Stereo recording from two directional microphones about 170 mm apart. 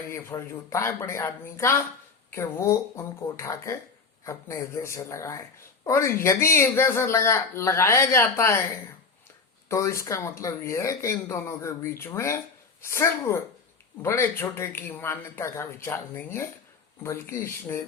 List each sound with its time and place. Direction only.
0.1 s speech: 15° left (ahead or behind)
9.6 s speech: 15° left (ahead or behind)